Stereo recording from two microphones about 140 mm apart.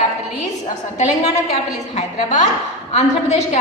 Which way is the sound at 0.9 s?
60° left (ahead or behind).